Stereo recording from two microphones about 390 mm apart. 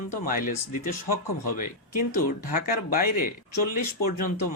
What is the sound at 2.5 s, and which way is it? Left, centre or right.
Speech, left.